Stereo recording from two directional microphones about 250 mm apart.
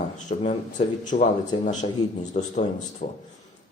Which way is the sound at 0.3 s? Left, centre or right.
Left.